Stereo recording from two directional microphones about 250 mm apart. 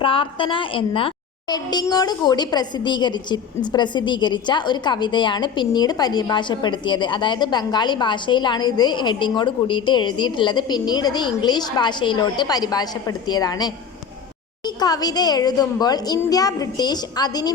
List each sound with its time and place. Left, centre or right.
0.0 s a woman's voice: left